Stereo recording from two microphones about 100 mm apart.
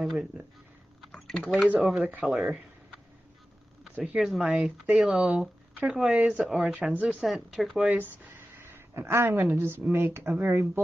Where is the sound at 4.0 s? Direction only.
5° right (ahead or behind).